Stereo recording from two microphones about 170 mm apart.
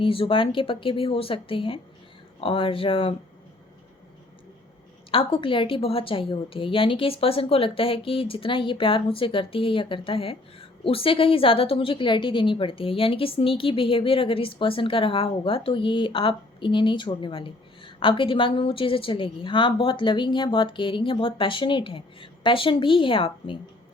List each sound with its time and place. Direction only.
0.0 s a woman's voice: 30° left (ahead or behind)
5.1 s a woman's voice: 30° left (ahead or behind)